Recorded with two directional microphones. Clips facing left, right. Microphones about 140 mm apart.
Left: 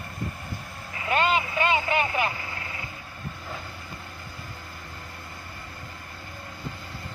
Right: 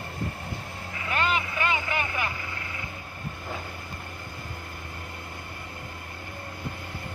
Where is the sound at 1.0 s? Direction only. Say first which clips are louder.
Left 4 dB; 20° left (ahead or behind).